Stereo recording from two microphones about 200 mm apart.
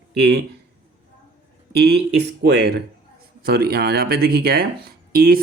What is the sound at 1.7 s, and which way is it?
Speech, 55° right (ahead or behind).